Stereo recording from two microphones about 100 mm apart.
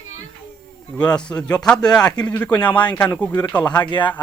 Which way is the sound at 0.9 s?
10° left (ahead or behind).